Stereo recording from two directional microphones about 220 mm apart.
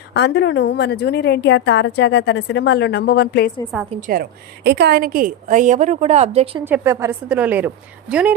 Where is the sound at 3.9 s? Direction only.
35° right (ahead or behind).